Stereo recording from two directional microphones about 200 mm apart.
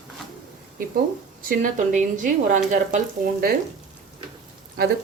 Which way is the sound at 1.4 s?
45° right (ahead or behind).